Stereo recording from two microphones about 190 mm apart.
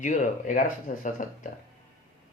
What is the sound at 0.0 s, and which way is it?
Speech, 40° left (ahead or behind).